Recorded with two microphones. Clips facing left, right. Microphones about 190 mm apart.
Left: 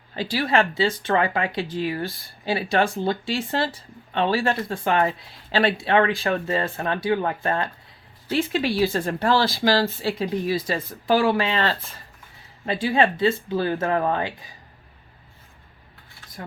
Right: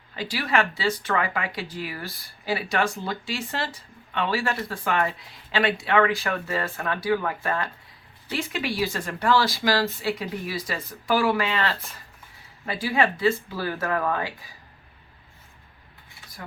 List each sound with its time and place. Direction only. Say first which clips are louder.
0.2 s speech: left 3 dB; 30° left (ahead or behind)